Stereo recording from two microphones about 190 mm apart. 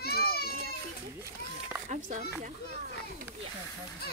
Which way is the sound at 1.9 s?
40° right (ahead or behind).